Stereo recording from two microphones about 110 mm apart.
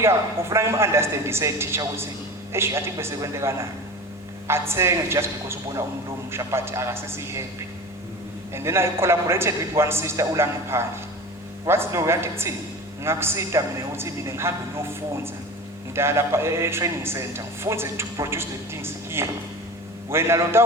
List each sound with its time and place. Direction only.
0.0 s a man's voice: 25° right (ahead or behind)
8.5 s a man's voice: 25° right (ahead or behind)